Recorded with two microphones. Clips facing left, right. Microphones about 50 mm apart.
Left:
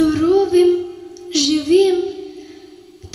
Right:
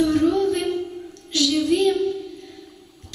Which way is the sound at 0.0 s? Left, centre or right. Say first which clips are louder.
Left 5 dB; left.